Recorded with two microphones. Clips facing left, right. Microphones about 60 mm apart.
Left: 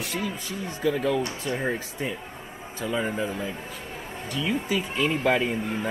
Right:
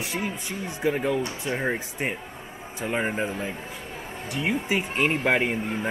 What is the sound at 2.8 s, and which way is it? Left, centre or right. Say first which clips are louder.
Speech: right 1 dB; right.